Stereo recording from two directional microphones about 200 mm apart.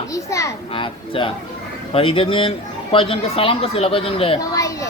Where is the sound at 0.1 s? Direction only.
15° left (ahead or behind).